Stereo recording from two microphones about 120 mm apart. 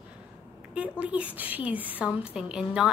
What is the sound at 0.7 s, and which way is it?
Speech, 10° right (ahead or behind).